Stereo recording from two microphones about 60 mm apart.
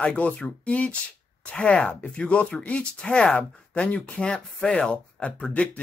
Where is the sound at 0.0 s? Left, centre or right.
Left.